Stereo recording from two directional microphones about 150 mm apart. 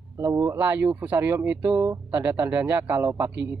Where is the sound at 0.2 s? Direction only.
20° right (ahead or behind).